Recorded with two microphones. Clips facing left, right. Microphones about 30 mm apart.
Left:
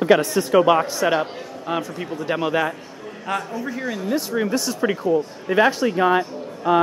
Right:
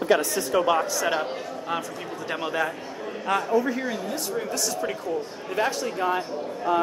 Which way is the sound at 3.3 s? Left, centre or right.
Centre.